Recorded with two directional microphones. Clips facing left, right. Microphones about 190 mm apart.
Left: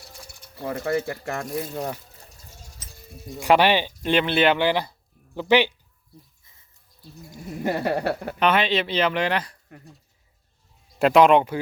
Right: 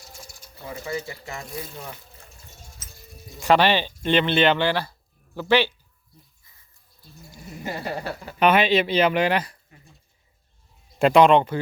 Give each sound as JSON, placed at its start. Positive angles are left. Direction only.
{"t": 0.0, "sound": "speech", "side_deg": 60}
{"t": 3.4, "sound": "speech", "side_deg": 10}
{"t": 6.4, "sound": "a sound", "side_deg": 25}
{"t": 7.3, "sound": "a sound", "side_deg": 0}
{"t": 7.6, "sound": "speech", "side_deg": 60}
{"t": 8.4, "sound": "speech", "side_deg": -10}
{"t": 11.0, "sound": "speech", "side_deg": 5}